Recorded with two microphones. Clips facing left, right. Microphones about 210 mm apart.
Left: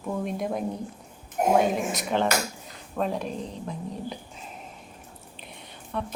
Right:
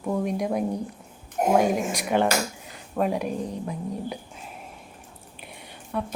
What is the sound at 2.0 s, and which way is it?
A woman's voice, 10° right (ahead or behind).